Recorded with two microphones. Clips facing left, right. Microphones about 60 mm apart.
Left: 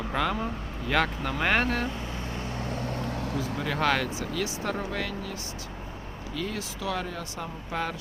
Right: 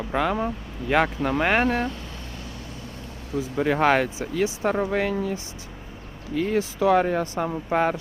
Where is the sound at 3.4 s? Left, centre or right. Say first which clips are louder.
Right 8 dB; centre.